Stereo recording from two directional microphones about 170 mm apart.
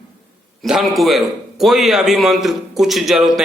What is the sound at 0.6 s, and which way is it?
A man's voice, centre (ahead or behind).